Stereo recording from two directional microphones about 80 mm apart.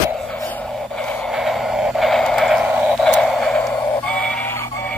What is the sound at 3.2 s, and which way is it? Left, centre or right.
Music, centre.